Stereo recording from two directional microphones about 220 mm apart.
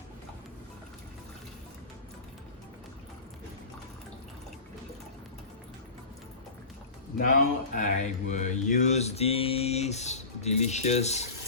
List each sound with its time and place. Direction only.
7.2 s speech: 40° left (ahead or behind)